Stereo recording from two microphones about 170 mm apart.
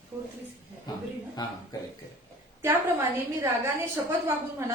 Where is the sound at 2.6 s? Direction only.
15° right (ahead or behind).